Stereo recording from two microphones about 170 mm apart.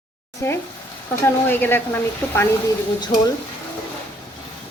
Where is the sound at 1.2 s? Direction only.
15° left (ahead or behind).